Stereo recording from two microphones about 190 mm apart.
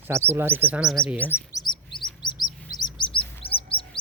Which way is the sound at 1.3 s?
20° left (ahead or behind).